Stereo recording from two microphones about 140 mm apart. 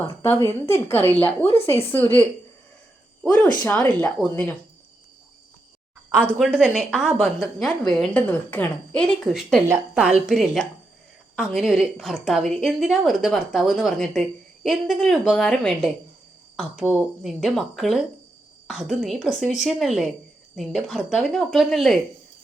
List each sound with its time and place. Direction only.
0.0 s a woman's voice: 15° left (ahead or behind)
3.2 s a woman's voice: 10° left (ahead or behind)
6.4 s a woman's voice: 5° right (ahead or behind)